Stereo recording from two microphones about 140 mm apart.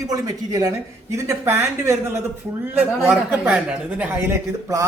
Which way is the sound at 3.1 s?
5° right (ahead or behind).